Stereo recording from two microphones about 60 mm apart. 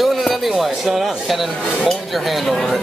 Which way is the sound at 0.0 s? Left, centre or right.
Centre.